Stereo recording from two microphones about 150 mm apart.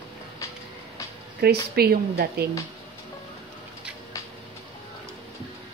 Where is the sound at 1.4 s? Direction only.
90° right.